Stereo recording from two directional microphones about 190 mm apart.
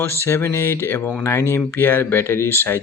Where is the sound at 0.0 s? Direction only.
15° left (ahead or behind).